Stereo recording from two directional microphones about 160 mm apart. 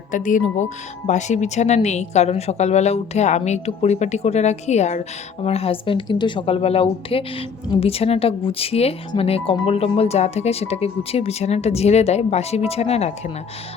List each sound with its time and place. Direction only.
0.1 s speech: 55° left (ahead or behind)